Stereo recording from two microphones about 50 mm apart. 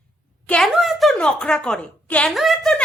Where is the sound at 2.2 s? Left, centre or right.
Centre.